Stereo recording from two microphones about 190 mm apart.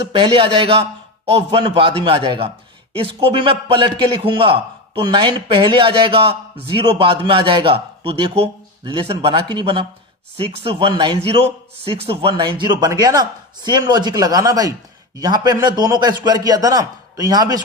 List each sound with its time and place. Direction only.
0.2 s a man's voice: 25° right (ahead or behind)